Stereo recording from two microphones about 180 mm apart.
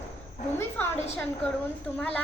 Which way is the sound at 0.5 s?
10° left (ahead or behind).